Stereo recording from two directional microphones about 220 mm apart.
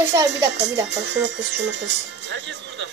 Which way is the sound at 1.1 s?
55° right (ahead or behind).